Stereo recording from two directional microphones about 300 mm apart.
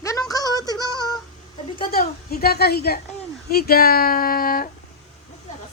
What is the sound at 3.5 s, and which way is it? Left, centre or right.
Speech, left.